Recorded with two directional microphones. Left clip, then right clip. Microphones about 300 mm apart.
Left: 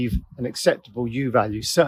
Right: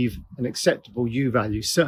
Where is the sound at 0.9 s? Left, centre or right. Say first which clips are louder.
Left 2 dB; centre.